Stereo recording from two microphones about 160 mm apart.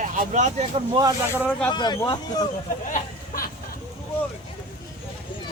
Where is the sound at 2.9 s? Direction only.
55° left (ahead or behind).